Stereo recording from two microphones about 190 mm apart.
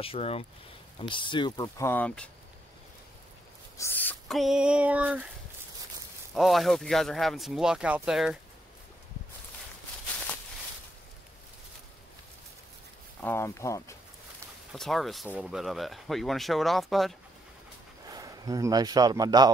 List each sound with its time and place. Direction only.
0.0 s speech: 30° left (ahead or behind); by 2.3 s 5° left (ahead or behind)
3.7 s a sound: 10° left (ahead or behind); by 5.3 s 5° right (ahead or behind)
6.3 s speech: centre (ahead or behind)
13.2 s speech: 10° left (ahead or behind)
14.7 s speech: centre (ahead or behind)
18.1 s a man's voice: 20° right (ahead or behind)